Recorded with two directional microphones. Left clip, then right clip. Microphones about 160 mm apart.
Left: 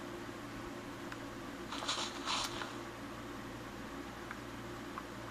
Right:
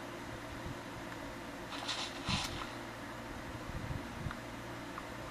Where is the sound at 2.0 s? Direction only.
40° left (ahead or behind).